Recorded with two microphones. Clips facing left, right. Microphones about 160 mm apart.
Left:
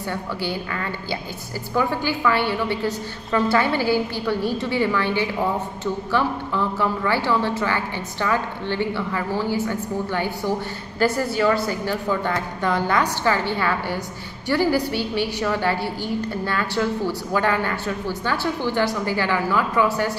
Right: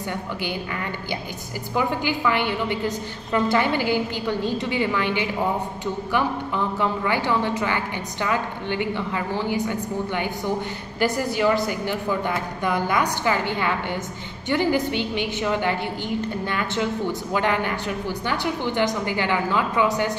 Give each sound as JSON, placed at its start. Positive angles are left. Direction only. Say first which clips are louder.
{"t": 0.1, "sound": "a woman's voice", "louder": "left 3 dB", "side_deg": -20}
{"t": 1.8, "sound": "a woman's voice", "louder": "left 1 dB", "side_deg": -15}